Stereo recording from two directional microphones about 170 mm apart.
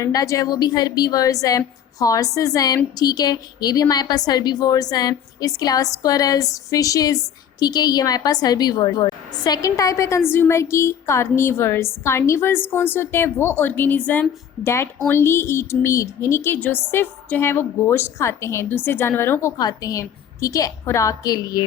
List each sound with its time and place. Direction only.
0.0 s a woman's voice: 20° left (ahead or behind)